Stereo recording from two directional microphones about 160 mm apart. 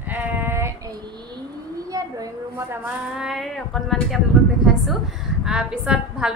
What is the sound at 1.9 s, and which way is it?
Speech, 20° right (ahead or behind).